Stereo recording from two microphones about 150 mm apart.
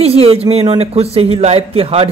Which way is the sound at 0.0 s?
40° right (ahead or behind).